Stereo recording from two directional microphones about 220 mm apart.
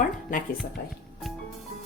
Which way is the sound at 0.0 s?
40° left (ahead or behind).